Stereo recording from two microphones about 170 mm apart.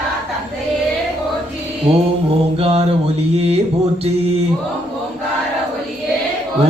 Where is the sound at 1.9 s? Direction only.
35° right (ahead or behind).